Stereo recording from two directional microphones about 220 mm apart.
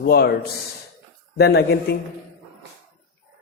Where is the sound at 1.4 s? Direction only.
45° left (ahead or behind).